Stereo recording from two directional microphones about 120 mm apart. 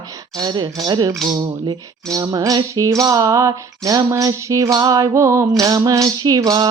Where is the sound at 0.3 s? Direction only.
35° right (ahead or behind).